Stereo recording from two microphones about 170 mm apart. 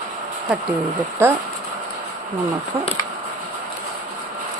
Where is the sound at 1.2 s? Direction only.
15° right (ahead or behind).